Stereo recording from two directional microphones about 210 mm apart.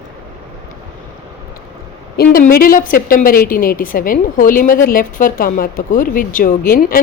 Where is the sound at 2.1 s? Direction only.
45° left (ahead or behind).